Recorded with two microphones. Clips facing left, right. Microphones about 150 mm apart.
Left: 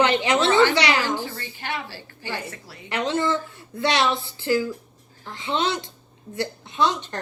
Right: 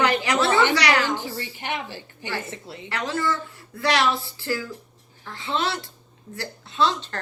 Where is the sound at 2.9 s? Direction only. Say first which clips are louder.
Left 3 dB; 20° left (ahead or behind).